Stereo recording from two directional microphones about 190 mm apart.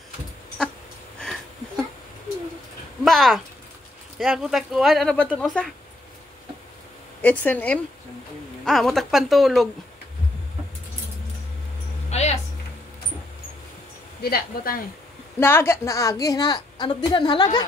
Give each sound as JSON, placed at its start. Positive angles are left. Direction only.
{"t": 3.0, "sound": "speech", "side_deg": 0}
{"t": 7.2, "sound": "speech", "side_deg": 10}
{"t": 12.1, "sound": "a sound", "side_deg": 35}
{"t": 14.2, "sound": "speech", "side_deg": 50}
{"t": 15.3, "sound": "a woman's voice", "side_deg": 10}